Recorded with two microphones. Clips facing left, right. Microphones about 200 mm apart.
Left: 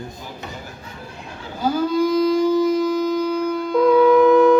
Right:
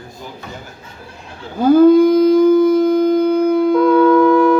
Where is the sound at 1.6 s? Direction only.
55° right (ahead or behind).